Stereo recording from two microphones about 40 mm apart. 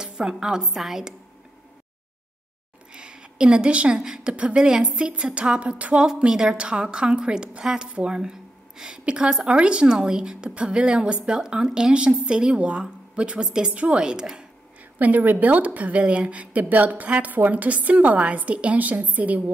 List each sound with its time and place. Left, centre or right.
0.0 s a woman's voice: centre
2.9 s a sound: right
4.0 s a woman's voice: centre
4.3 s a woman's voice: right
4.6 s a woman's voice: centre
9.9 s a woman's voice: centre
13.4 s a woman's voice: centre
13.7 s a woman's voice: right
15.0 s a woman's voice: right